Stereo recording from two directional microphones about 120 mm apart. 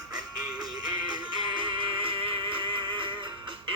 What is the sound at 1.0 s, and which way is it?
Music, 40° right (ahead or behind).